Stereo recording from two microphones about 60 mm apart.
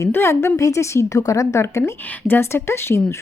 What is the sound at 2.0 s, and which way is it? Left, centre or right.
Speech, left.